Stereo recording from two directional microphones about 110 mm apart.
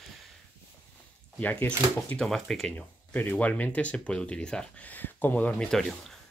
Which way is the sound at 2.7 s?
15° left (ahead or behind).